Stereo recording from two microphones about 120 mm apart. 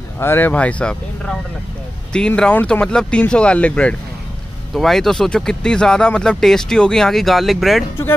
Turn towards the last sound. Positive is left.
turn(degrees=0)  # may be behind; listen again after turning